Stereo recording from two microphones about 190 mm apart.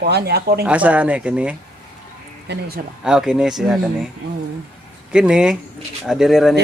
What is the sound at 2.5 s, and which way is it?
Speech, 55° right (ahead or behind).